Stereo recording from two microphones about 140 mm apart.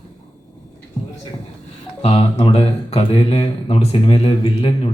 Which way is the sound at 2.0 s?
45° left (ahead or behind).